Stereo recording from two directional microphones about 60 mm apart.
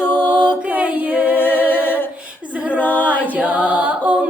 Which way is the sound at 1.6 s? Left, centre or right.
Left.